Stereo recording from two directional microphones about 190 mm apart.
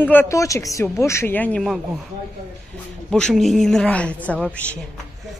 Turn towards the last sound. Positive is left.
turn(degrees=5)  # may be behind; listen again after turning